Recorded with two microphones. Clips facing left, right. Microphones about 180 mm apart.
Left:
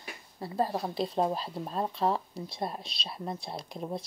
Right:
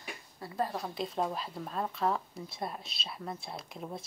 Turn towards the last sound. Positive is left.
turn(degrees=35)  # may be behind; listen again after turning